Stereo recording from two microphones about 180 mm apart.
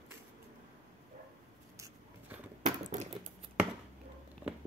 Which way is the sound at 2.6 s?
40° right (ahead or behind).